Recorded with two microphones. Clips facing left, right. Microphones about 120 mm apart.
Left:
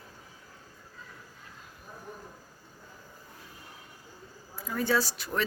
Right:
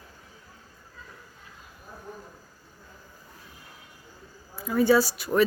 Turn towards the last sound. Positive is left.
turn(degrees=-10)  # may be behind; listen again after turning